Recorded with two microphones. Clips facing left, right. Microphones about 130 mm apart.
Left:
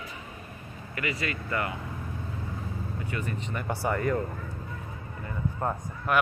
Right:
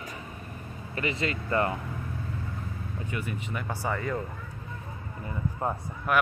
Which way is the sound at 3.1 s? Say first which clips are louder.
Even; 10° right (ahead or behind).